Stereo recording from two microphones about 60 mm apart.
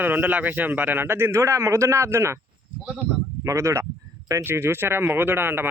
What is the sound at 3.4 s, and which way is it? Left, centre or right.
Speech, right.